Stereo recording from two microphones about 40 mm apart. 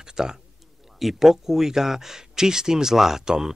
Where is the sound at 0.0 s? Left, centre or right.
Centre.